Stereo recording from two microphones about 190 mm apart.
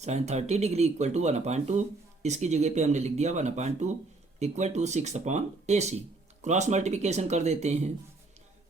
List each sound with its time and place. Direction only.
0.0 s speech: 35° right (ahead or behind)